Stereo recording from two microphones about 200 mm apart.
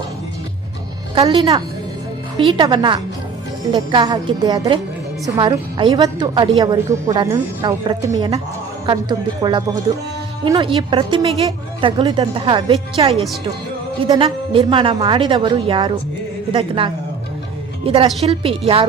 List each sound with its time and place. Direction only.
1.1 s a woman's voice: 25° right (ahead or behind)